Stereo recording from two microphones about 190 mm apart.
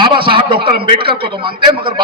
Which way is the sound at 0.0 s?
25° right (ahead or behind).